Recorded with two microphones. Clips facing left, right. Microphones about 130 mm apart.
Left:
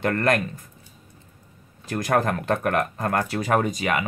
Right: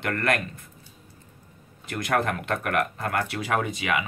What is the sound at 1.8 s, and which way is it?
Speech, 40° left (ahead or behind).